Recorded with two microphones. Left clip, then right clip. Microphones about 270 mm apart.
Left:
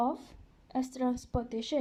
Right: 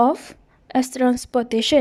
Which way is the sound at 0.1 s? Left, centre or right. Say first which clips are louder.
Right 15 dB; right.